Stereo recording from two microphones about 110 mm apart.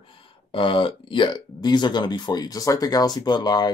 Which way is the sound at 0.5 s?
50° left (ahead or behind).